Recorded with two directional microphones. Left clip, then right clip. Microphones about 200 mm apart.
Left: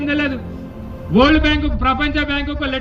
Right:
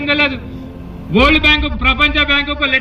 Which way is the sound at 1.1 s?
30° left (ahead or behind).